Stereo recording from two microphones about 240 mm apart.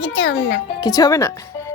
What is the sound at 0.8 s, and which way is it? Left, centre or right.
Speech, centre.